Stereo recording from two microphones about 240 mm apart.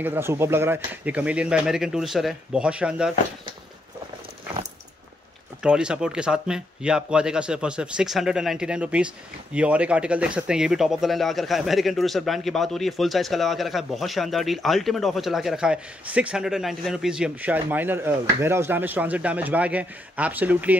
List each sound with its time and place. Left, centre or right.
0.0 s speech: centre
5.6 s speech: centre